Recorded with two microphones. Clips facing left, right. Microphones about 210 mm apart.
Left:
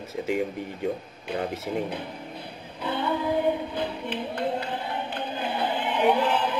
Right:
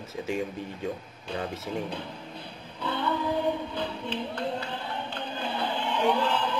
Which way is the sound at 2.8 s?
15° left (ahead or behind).